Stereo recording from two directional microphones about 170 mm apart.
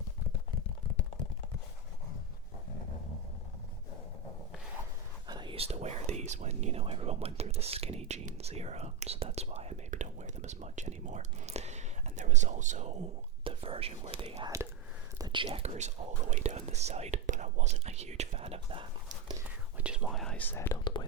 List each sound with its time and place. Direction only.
5.3 s speech: 30° right (ahead or behind); by 12.9 s 45° right (ahead or behind)
13.4 s speech: 30° right (ahead or behind)
14.4 s speech: 20° right (ahead or behind)
19.8 s speech: 5° right (ahead or behind); by 20.7 s 10° left (ahead or behind)